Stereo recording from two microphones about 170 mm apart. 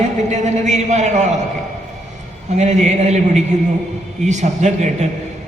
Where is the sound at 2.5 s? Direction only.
40° right (ahead or behind).